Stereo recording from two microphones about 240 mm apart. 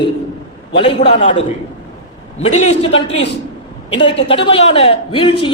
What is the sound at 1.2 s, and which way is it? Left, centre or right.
A man's voice, left.